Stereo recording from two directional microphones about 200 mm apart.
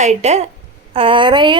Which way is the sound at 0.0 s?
35° right (ahead or behind).